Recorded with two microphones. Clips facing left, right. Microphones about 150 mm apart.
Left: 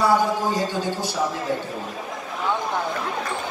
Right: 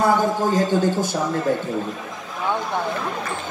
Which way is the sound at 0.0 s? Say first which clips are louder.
Right 1 dB; 45° right (ahead or behind).